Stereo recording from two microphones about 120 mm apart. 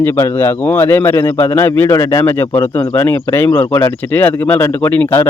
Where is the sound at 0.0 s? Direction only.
20° left (ahead or behind).